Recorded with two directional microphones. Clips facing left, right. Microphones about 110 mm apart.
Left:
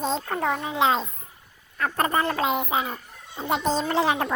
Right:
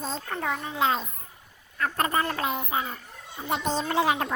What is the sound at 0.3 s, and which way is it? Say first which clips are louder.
Speech: left 2 dB; 45° left (ahead or behind).